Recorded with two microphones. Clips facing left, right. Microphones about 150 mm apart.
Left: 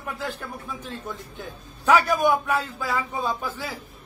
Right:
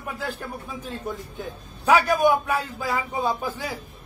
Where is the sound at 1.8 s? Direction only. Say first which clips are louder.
Right 1 dB; 10° right (ahead or behind).